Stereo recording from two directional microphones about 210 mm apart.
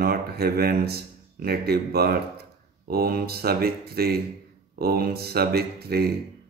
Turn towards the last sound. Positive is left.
turn(degrees=-50)  # may be behind; listen again after turning